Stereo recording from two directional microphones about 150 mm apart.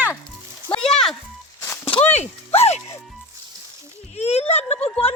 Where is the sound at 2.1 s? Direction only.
45° left (ahead or behind).